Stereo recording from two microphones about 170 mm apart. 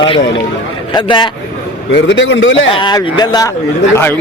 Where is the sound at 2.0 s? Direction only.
90° left.